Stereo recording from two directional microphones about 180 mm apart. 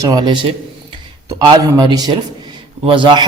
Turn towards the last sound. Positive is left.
turn(degrees=-25)  # may be behind; listen again after turning